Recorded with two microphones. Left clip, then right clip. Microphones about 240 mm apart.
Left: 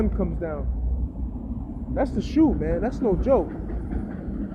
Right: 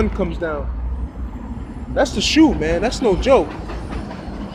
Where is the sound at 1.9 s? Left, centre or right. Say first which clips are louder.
Right 8 dB; centre.